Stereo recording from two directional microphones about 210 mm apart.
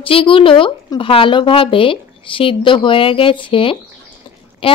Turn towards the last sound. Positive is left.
turn(degrees=25)  # may be behind; listen again after turning